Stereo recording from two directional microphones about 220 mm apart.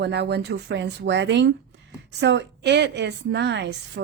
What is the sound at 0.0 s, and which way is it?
A woman's voice, 50° right (ahead or behind).